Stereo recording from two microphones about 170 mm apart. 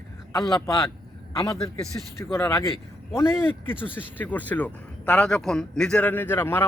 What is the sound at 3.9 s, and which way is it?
Speech, 10° left (ahead or behind).